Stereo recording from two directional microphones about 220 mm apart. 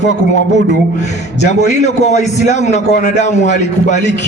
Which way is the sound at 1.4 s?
30° left (ahead or behind).